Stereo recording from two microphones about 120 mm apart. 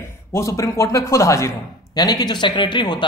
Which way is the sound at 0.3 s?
25° left (ahead or behind).